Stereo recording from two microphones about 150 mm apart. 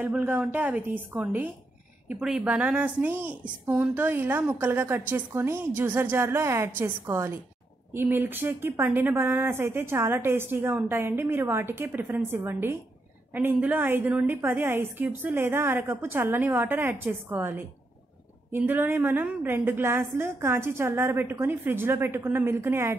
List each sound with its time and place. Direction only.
0.0 s speech: 10° right (ahead or behind)